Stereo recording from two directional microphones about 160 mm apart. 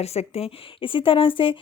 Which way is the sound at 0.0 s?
40° left (ahead or behind).